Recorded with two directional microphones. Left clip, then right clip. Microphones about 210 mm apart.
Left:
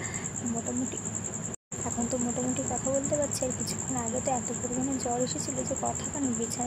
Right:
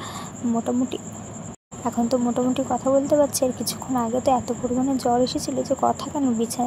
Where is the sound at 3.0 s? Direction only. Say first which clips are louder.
Right 10 dB; 35° right (ahead or behind).